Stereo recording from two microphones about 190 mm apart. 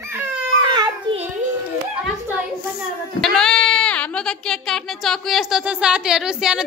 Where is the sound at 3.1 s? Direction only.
Centre (ahead or behind).